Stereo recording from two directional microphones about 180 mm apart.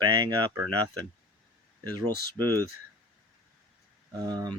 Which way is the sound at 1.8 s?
20° right (ahead or behind).